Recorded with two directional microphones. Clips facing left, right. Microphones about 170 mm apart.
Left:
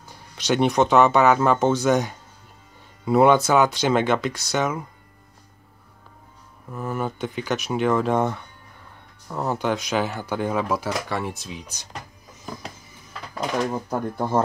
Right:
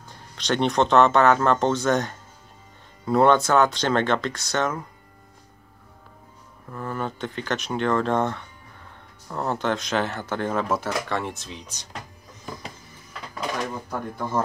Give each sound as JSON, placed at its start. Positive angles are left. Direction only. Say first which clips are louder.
{"t": 0.4, "sound": "speech", "louder": "left 2 dB", "side_deg": 5}
{"t": 6.7, "sound": "speech", "louder": "left 2 dB", "side_deg": 10}
{"t": 13.8, "sound": "speech", "louder": "left 4 dB", "side_deg": 30}